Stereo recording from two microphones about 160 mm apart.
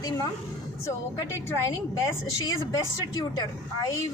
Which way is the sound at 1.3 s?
20° left (ahead or behind).